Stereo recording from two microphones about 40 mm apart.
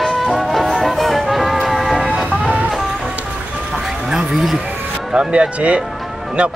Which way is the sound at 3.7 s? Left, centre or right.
Centre.